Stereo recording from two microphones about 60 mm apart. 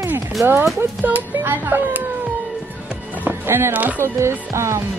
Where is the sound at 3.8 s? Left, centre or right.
Right.